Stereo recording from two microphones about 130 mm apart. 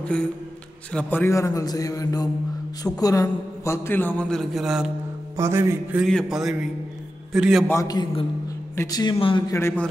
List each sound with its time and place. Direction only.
0.0 s a man's voice: 5° left (ahead or behind)
5.4 s a sound: 20° right (ahead or behind)
6.0 s speech: centre (ahead or behind)
7.6 s a man's voice: 25° left (ahead or behind)